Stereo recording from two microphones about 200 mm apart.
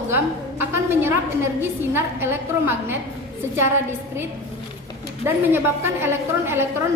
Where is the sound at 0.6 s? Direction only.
10° right (ahead or behind).